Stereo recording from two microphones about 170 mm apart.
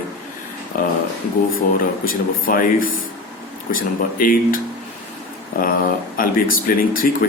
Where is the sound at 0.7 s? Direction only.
55° left (ahead or behind).